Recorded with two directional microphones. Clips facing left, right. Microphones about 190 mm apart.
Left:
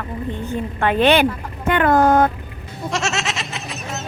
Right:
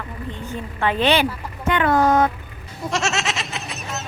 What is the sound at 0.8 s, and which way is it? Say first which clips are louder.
A woman's voice: left 3 dB; 55° left (ahead or behind).